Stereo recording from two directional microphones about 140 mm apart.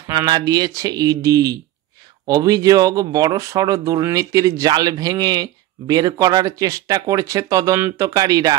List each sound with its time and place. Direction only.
0.1 s speech: 30° right (ahead or behind)